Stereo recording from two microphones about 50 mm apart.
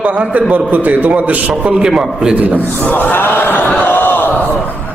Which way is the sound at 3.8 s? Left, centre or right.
Left.